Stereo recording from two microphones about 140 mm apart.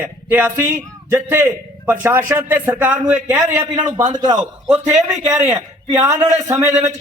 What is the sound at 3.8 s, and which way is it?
Speech, 30° right (ahead or behind).